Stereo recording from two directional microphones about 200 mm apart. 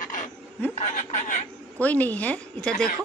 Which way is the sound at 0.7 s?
35° left (ahead or behind).